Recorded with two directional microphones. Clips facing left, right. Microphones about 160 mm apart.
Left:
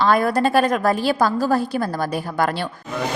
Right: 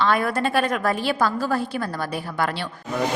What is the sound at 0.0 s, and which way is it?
A woman's voice, 40° left (ahead or behind).